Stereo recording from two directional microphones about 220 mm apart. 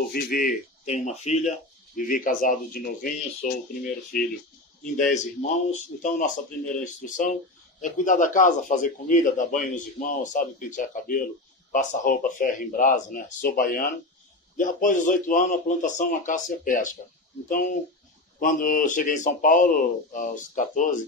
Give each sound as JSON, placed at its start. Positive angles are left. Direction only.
{"t": 0.1, "sound": "a man's voice", "side_deg": 40}
{"t": 5.1, "sound": "a man's voice", "side_deg": 35}